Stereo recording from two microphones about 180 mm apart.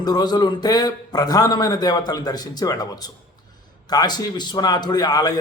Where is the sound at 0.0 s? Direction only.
20° left (ahead or behind).